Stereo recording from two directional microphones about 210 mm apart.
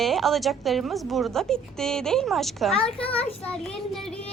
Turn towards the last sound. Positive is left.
turn(degrees=0)  # may be behind; listen again after turning